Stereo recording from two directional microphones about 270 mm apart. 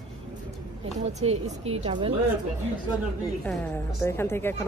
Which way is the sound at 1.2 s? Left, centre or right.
Right.